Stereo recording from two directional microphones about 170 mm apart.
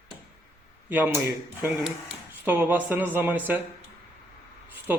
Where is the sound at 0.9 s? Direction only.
10° right (ahead or behind).